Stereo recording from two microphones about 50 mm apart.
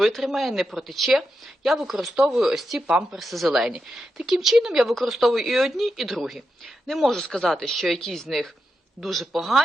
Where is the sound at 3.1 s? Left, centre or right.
Centre.